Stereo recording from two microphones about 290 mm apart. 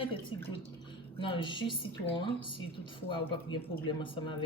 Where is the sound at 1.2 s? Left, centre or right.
Centre.